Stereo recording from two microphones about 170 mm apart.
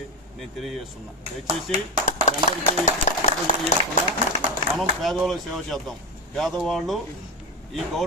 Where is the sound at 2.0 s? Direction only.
45° left (ahead or behind).